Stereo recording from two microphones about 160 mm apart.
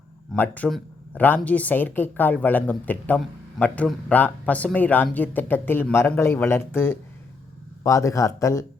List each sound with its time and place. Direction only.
0.3 s speech: 10° left (ahead or behind)